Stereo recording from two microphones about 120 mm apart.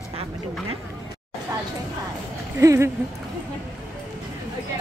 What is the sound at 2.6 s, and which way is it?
Speech, 25° right (ahead or behind).